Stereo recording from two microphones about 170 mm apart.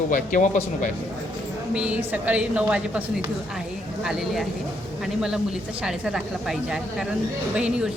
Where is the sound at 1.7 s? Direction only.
5° right (ahead or behind).